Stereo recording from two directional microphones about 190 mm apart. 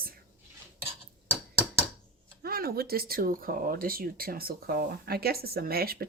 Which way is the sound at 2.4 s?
55° right (ahead or behind).